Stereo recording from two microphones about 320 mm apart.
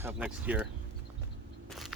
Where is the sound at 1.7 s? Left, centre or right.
Centre.